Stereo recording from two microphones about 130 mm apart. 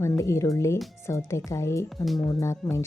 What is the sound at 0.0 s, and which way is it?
Speech, 25° left (ahead or behind).